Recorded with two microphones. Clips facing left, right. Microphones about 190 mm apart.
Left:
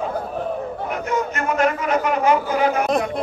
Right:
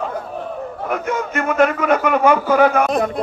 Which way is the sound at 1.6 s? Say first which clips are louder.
Right 5 dB; 55° right (ahead or behind).